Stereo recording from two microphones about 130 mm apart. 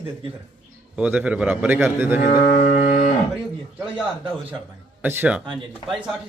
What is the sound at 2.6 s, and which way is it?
Livestock, 65° left (ahead or behind).